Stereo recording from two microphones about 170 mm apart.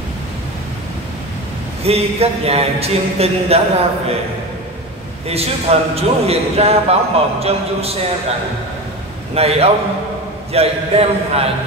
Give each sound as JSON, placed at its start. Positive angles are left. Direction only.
{"t": 1.8, "sound": "a man's voice", "side_deg": -35}
{"t": 5.3, "sound": "a man's voice", "side_deg": -35}
{"t": 9.3, "sound": "a man's voice", "side_deg": -35}